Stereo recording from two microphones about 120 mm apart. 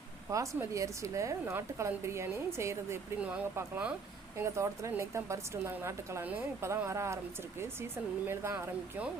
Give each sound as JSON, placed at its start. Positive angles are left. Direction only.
{"t": 0.3, "sound": "a woman's voice", "side_deg": -25}
{"t": 3.2, "sound": "speech", "side_deg": -10}
{"t": 4.4, "sound": "a woman's voice", "side_deg": -25}
{"t": 8.3, "sound": "a woman's voice", "side_deg": -20}